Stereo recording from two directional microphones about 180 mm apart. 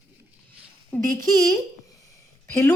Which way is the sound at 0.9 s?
5° left (ahead or behind).